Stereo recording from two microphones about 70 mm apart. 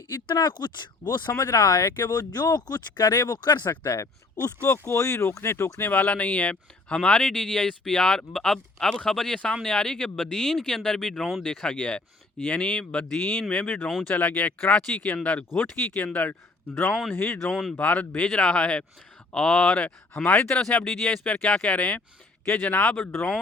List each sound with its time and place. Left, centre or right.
0.3 s speech: left
2.0 s speech: left
3.6 s speech: left
3.9 s speech: left
5.9 s speech: left
13.8 s speech: centre
14.1 s speech: centre
16.9 s speech: centre
17.2 s speech: left
17.4 s speech: centre
17.7 s speech: left